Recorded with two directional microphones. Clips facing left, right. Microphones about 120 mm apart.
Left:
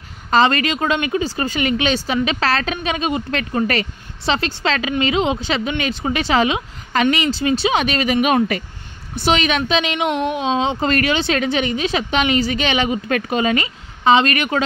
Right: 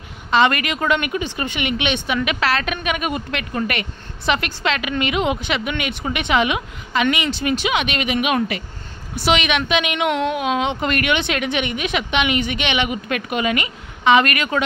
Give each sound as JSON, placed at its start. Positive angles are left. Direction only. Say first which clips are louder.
{"t": 0.3, "sound": "a woman's voice", "louder": "left 2 dB", "side_deg": 30}
{"t": 3.3, "sound": "a woman's voice", "louder": "left 4 dB", "side_deg": 35}
{"t": 9.9, "sound": "a woman's voice", "louder": "even", "side_deg": 20}